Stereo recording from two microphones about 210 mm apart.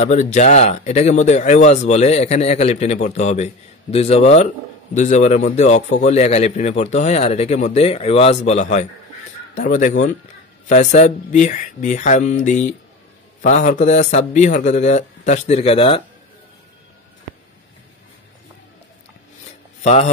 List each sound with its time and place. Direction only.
0.0 s speech: 35° left (ahead or behind)
19.8 s speech: 35° left (ahead or behind)